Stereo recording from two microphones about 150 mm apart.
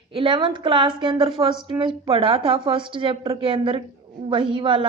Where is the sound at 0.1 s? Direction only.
35° right (ahead or behind).